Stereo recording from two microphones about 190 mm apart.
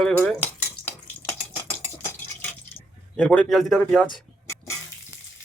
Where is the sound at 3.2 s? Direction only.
5° left (ahead or behind).